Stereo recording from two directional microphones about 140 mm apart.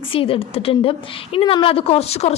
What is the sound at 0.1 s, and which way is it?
A woman's voice, 40° left (ahead or behind).